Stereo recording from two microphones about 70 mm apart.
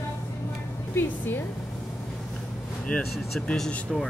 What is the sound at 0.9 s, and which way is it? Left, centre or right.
Speech, left.